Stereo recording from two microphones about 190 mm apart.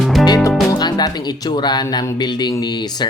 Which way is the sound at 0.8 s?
20° left (ahead or behind).